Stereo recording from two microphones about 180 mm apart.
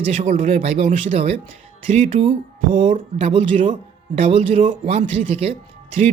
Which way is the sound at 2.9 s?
45° right (ahead or behind).